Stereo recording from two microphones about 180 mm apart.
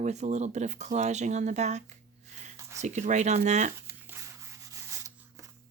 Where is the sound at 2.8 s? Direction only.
40° right (ahead or behind).